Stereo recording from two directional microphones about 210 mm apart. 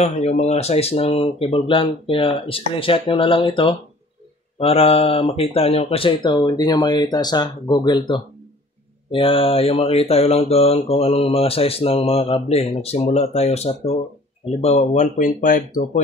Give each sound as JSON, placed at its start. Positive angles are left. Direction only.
{"t": 0.0, "sound": "speech", "side_deg": 30}